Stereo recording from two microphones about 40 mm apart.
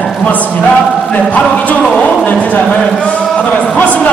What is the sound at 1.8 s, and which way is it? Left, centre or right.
Speech, left.